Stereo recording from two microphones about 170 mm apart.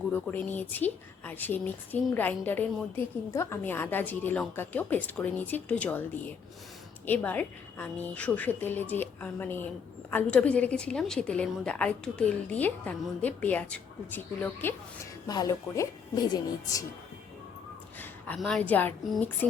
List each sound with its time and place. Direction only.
0.1 s a woman's voice: 10° left (ahead or behind)
18.3 s a woman's voice: 5° left (ahead or behind)